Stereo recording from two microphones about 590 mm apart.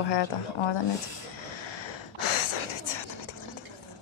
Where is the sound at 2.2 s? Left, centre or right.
Left.